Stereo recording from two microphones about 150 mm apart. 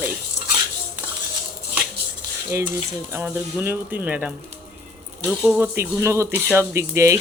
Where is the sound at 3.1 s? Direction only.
15° right (ahead or behind).